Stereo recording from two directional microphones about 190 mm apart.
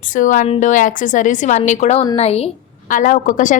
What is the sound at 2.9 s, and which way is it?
Speech, 45° left (ahead or behind).